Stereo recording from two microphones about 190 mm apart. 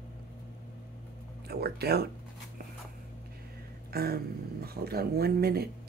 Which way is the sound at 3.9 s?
55° right (ahead or behind).